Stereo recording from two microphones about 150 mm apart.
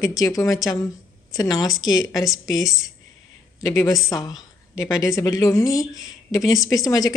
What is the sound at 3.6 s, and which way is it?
Speech, 25° left (ahead or behind).